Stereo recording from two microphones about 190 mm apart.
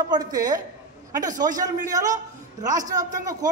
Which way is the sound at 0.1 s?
20° right (ahead or behind).